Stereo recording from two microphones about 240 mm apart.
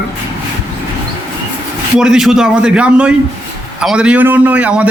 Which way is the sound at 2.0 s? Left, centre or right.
Centre.